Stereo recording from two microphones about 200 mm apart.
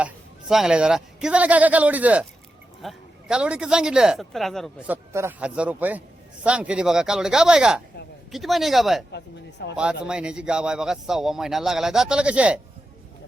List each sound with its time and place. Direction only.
0.0 s a man's voice: 5° right (ahead or behind)
9.1 s speech: 60° left (ahead or behind)
9.7 s speech: 5° right (ahead or behind)